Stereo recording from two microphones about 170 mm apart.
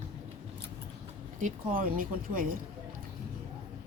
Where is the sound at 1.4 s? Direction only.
50° right (ahead or behind).